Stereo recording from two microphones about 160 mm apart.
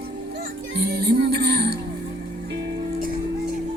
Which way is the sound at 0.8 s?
85° right.